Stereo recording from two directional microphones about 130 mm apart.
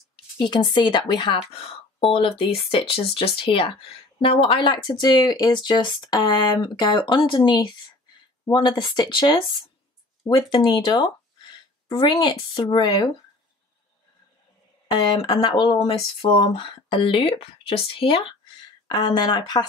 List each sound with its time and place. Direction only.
0.1 s speech: 35° left (ahead or behind)
14.9 s speech: 35° left (ahead or behind)
18.9 s speech: 35° left (ahead or behind)